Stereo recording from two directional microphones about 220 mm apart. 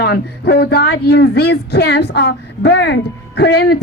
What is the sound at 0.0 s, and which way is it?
A woman's voice, 45° left (ahead or behind).